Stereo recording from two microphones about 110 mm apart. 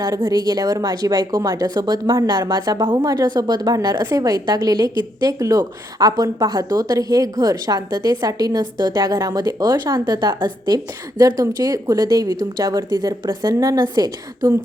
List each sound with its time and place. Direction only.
0.0 s a woman's voice: 35° right (ahead or behind)